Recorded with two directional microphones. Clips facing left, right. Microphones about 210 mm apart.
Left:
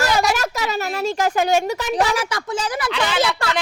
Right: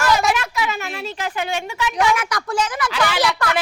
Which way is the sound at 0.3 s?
40° left (ahead or behind).